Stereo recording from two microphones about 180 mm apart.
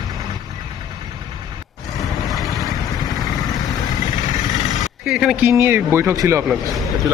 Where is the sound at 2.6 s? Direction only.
Centre (ahead or behind).